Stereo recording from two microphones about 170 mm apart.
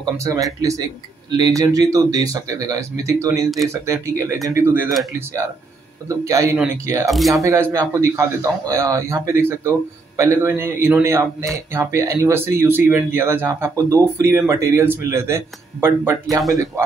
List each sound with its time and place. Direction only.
0.0 s speech: 20° right (ahead or behind)
6.0 s speech: 20° right (ahead or behind)
7.1 s speech: centre (ahead or behind)
7.4 s speech: 15° right (ahead or behind)